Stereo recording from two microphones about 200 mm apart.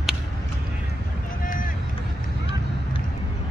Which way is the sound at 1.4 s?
45° left (ahead or behind).